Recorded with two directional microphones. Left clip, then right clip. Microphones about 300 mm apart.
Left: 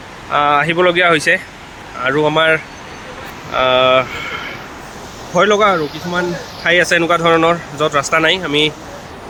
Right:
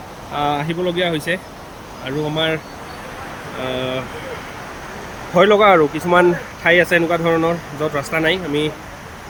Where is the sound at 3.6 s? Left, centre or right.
Centre.